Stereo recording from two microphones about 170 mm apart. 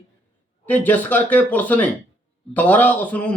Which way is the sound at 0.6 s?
10° left (ahead or behind).